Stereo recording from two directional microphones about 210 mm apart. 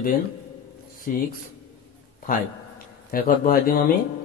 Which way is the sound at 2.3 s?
45° left (ahead or behind).